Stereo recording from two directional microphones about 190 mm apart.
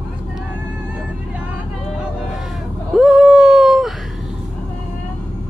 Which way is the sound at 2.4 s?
Centre (ahead or behind).